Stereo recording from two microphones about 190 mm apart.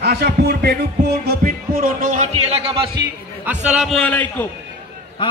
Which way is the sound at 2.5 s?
30° right (ahead or behind).